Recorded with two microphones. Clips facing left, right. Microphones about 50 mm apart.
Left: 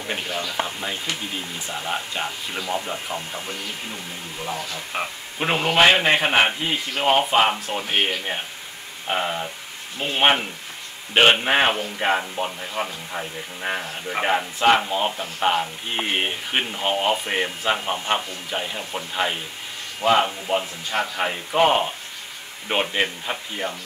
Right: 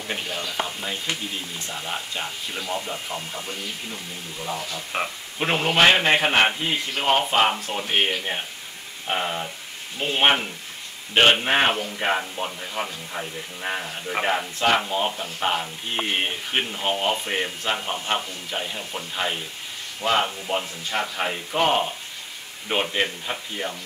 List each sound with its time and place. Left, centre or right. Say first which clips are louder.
0.0 s a man's voice: left 2 dB; centre
4.9 s a man's voice: right 1 dB; centre